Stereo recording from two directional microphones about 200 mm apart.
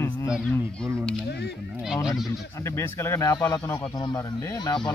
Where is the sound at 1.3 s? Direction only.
55° left (ahead or behind).